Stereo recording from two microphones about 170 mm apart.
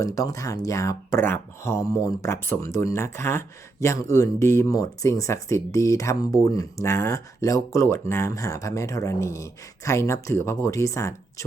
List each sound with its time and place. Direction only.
0.0 s speech: 20° left (ahead or behind)